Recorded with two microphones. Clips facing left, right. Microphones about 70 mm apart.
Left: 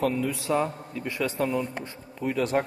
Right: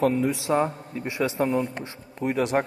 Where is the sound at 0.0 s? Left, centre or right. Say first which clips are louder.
Right 4 dB; right.